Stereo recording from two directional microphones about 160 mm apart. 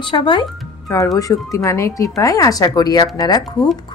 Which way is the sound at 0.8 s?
20° left (ahead or behind).